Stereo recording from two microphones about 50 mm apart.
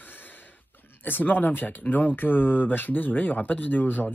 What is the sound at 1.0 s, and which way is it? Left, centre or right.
Speech, left.